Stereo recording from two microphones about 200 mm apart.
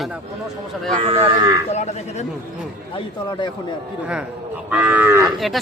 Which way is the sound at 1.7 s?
35° left (ahead or behind).